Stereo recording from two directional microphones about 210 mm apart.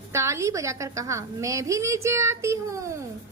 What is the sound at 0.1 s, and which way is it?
A woman's voice, 15° right (ahead or behind).